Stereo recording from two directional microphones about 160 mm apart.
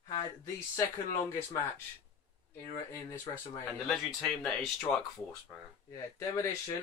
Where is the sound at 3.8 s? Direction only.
5° left (ahead or behind).